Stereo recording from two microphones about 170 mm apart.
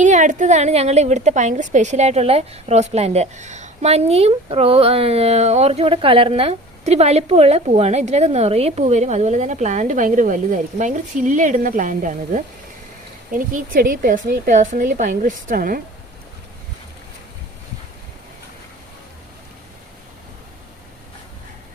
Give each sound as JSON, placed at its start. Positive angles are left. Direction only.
{"t": 0.0, "sound": "a woman's voice", "side_deg": -45}